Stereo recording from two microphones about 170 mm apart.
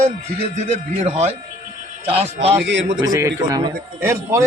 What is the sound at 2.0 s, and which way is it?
Speech, 35° right (ahead or behind).